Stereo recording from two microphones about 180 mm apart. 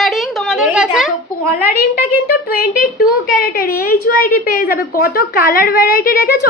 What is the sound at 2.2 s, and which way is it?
A woman's voice, 55° left (ahead or behind).